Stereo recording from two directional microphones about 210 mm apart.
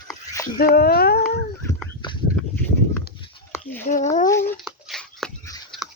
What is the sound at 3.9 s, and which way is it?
Speech, 35° left (ahead or behind).